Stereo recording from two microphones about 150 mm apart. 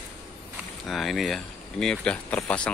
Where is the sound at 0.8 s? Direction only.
Centre (ahead or behind).